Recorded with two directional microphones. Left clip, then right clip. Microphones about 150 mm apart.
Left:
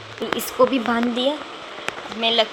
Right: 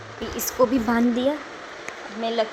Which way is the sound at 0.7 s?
20° right (ahead or behind).